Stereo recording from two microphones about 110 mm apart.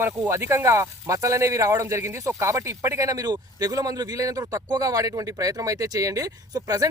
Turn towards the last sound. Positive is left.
turn(degrees=-35)  # may be behind; listen again after turning